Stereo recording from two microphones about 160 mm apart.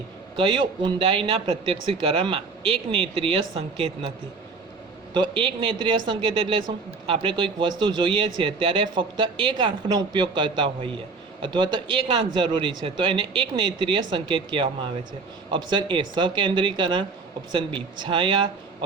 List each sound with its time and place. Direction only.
0.3 s speech: 30° right (ahead or behind)
5.1 s a man's voice: 30° right (ahead or behind)